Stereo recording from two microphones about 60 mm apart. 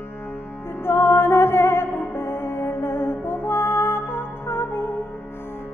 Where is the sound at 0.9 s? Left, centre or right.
Left.